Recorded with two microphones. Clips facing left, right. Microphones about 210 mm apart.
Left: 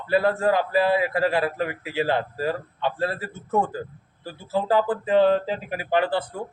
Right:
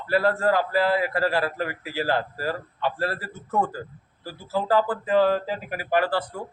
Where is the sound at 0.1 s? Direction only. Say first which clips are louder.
Left 1 dB; 20° left (ahead or behind).